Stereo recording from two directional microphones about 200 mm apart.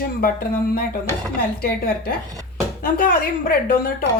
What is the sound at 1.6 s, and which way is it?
A woman's voice, 50° left (ahead or behind).